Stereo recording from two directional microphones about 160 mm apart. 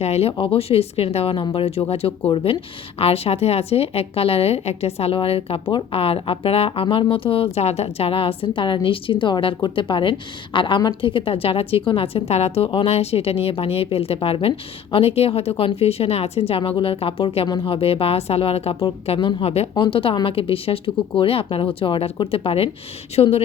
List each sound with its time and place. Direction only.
0.0 s speech: 40° left (ahead or behind)